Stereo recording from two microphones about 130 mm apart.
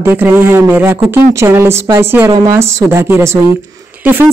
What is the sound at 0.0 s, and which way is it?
A woman's voice, 15° right (ahead or behind).